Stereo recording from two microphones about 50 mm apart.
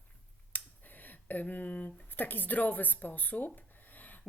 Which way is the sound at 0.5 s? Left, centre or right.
Left.